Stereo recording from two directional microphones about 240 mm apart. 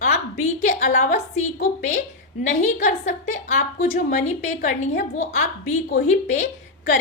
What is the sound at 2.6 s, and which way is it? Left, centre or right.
A woman's voice, left.